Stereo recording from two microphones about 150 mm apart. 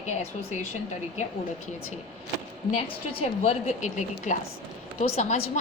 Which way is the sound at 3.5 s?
50° left (ahead or behind).